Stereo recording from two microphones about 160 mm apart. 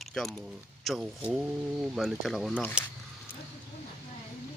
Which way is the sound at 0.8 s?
5° right (ahead or behind).